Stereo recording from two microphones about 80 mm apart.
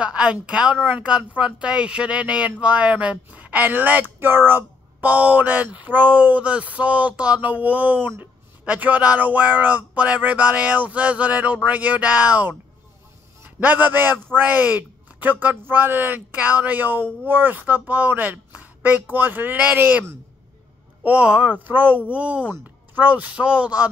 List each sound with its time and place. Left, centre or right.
0.0 s a woman's voice: centre
13.6 s a man's voice: right